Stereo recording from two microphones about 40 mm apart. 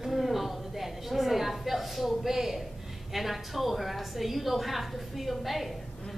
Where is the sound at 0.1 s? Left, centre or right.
Centre.